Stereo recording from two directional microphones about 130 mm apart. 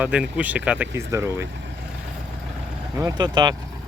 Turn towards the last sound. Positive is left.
turn(degrees=-30)  # may be behind; listen again after turning